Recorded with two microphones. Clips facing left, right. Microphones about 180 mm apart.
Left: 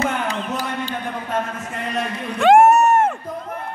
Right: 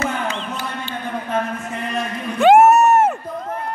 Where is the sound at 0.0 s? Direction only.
35° left (ahead or behind).